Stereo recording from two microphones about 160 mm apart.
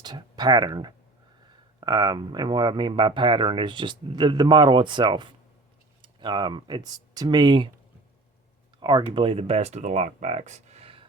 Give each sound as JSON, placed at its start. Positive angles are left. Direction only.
{"t": 0.0, "sound": "speech", "side_deg": -25}
{"t": 8.8, "sound": "speech", "side_deg": -25}